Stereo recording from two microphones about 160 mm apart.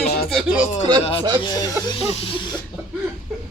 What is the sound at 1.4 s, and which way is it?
Speech, 25° left (ahead or behind).